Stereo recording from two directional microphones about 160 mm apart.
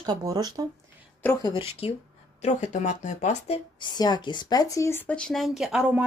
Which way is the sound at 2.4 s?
50° left (ahead or behind).